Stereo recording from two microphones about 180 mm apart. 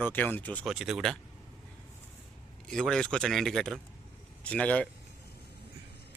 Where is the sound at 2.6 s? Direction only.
5° left (ahead or behind).